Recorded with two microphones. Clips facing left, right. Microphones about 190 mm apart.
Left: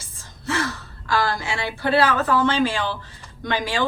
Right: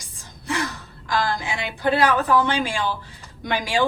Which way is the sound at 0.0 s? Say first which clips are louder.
Left 7 dB; 15° right (ahead or behind).